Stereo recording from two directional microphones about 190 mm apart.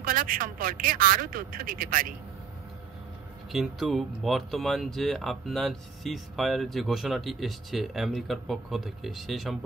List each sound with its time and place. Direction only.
0.0 s speech: 50° right (ahead or behind)
3.5 s speech: centre (ahead or behind)